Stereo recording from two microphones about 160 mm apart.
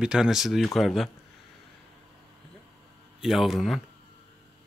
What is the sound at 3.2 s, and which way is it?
Speech, centre (ahead or behind).